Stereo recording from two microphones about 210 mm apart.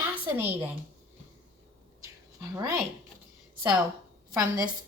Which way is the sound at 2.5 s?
15° right (ahead or behind).